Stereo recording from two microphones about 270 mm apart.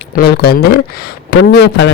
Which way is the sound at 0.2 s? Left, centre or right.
Left.